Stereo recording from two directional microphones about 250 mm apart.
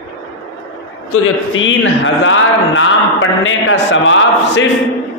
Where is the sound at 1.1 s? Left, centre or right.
Left.